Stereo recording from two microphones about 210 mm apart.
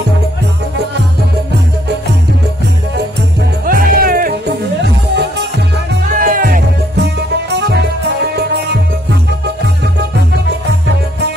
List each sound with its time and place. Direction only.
3.6 s music: 40° right (ahead or behind)
6.0 s music: 40° right (ahead or behind)